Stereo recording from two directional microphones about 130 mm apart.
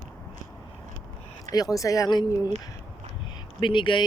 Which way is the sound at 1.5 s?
30° left (ahead or behind).